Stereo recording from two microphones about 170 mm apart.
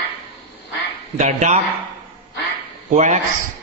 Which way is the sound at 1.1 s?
45° right (ahead or behind).